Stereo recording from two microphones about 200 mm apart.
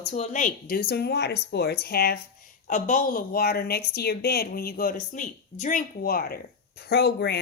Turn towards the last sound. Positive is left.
turn(degrees=55)  # may be behind; listen again after turning